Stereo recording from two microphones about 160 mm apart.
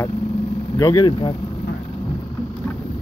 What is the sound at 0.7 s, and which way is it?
Speech, 20° left (ahead or behind).